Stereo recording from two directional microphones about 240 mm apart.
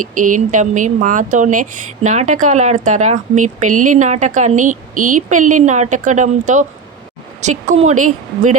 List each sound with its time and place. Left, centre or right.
0.0 s speech: right
7.7 s speech: right